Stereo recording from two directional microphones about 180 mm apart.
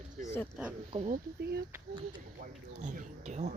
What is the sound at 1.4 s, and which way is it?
Speech, 65° right (ahead or behind).